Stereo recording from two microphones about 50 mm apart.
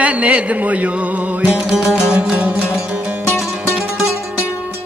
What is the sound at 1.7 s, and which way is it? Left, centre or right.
Music, centre.